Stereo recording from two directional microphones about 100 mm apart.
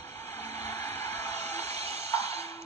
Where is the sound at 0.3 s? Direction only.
20° left (ahead or behind).